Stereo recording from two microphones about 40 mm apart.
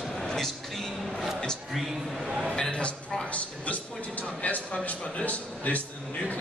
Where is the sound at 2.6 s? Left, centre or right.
Left.